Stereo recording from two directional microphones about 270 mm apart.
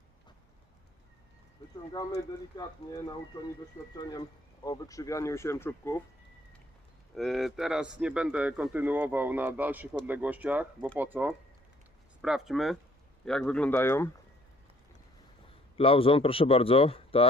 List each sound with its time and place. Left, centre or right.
2.5 s speech: centre
4.6 s speech: centre
7.2 s speech: centre
15.8 s speech: centre